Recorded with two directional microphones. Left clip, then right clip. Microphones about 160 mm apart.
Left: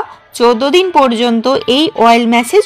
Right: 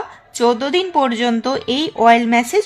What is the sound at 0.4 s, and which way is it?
A woman's voice, 15° left (ahead or behind).